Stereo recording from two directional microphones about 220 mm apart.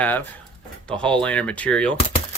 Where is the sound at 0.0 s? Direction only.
10° left (ahead or behind).